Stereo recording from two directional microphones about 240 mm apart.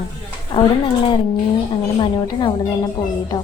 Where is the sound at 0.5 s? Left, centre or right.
Centre.